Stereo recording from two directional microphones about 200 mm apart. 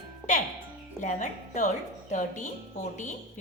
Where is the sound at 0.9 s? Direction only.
40° left (ahead or behind).